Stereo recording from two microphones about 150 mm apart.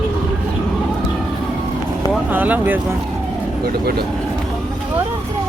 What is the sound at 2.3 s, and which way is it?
Speech, 10° right (ahead or behind).